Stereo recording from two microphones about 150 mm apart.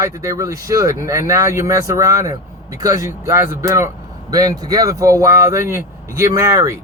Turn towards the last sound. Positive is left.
turn(degrees=-20)  # may be behind; listen again after turning